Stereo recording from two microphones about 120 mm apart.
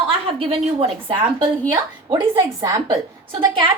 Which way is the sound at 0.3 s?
50° right (ahead or behind).